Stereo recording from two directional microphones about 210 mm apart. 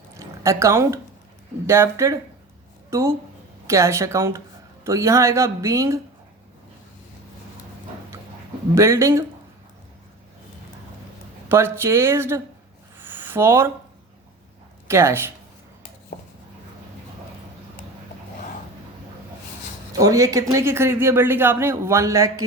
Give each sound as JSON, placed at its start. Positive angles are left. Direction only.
{"t": 0.1, "sound": "a sound", "side_deg": -15}
{"t": 1.6, "sound": "a man's voice", "side_deg": -15}
{"t": 8.7, "sound": "a man's voice", "side_deg": -15}
{"t": 11.4, "sound": "a man's voice", "side_deg": -10}
{"t": 13.0, "sound": "a sound", "side_deg": -10}
{"t": 14.8, "sound": "a woman's voice", "side_deg": -10}
{"t": 16.1, "sound": "chopping", "side_deg": 50}
{"t": 20.0, "sound": "a man's voice", "side_deg": -15}